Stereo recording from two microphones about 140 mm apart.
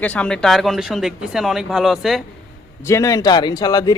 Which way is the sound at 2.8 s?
20° left (ahead or behind).